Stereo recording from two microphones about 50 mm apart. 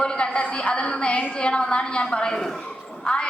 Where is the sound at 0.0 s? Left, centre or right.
Left.